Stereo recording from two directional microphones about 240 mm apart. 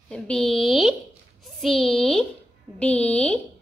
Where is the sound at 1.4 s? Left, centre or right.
Centre.